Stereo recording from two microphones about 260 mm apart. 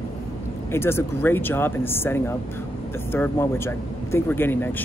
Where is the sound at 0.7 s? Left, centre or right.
Centre.